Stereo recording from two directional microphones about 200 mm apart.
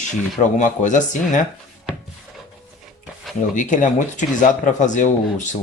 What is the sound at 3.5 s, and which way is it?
Speech, 40° left (ahead or behind).